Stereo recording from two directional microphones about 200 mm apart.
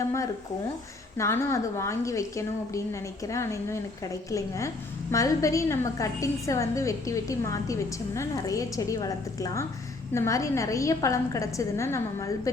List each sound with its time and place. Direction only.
1.1 s a woman's voice: 15° left (ahead or behind)